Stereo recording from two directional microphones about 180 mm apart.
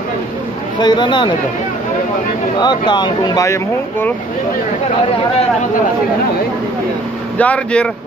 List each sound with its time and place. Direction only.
0.7 s speech: 25° left (ahead or behind)
2.6 s speech: 25° left (ahead or behind)
7.3 s speech: 5° left (ahead or behind)